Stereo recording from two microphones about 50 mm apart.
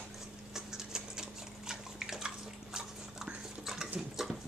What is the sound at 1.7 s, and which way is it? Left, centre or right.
Bathtub, centre.